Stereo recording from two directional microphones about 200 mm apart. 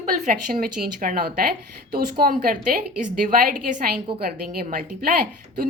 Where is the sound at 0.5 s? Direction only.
50° right (ahead or behind).